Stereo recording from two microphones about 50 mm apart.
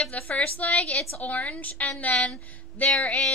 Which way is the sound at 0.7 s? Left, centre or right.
Centre.